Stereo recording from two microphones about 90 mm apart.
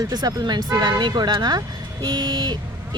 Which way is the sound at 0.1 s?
50° right (ahead or behind).